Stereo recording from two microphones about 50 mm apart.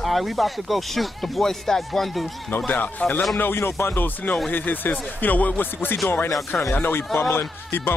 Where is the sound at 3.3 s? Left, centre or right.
Left.